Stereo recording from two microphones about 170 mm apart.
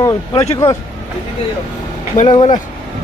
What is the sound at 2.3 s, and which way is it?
Speech, 30° left (ahead or behind).